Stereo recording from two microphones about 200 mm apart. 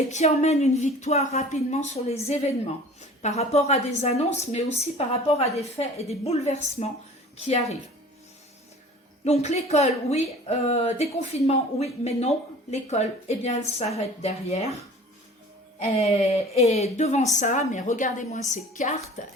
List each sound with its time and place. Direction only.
0.1 s a woman's voice: 35° left (ahead or behind)
9.2 s a woman's voice: 30° left (ahead or behind)
15.8 s a woman's voice: 30° left (ahead or behind)